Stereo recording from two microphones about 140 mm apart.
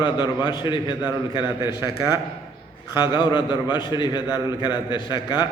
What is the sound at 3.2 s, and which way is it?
A man's voice, 30° left (ahead or behind).